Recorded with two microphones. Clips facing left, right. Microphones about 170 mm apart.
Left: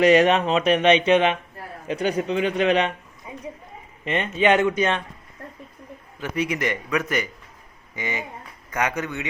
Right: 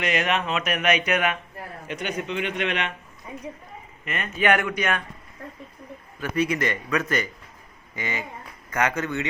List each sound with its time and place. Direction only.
0.0 s a man's voice: 35° left (ahead or behind)
3.3 s a sound: 15° left (ahead or behind)
4.0 s speech: 30° left (ahead or behind)
6.1 s a man's voice: 15° left (ahead or behind)